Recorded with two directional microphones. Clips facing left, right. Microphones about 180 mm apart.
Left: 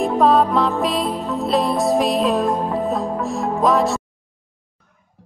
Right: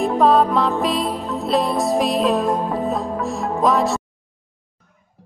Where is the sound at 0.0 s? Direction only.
Centre (ahead or behind).